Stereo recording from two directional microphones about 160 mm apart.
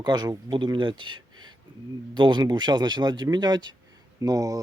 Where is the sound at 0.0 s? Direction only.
25° right (ahead or behind).